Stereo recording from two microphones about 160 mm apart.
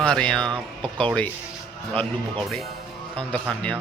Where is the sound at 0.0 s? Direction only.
5° left (ahead or behind).